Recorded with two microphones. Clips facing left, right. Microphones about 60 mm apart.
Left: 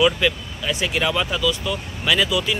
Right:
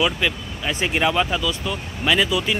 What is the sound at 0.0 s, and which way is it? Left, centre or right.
Speech, centre.